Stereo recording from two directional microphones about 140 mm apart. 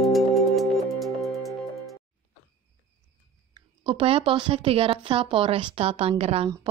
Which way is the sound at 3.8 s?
40° right (ahead or behind).